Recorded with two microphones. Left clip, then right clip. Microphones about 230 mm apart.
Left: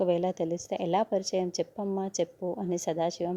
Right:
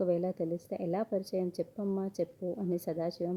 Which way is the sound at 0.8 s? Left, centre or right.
Left.